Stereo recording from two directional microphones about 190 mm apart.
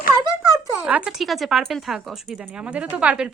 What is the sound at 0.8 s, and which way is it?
Speech, 10° right (ahead or behind).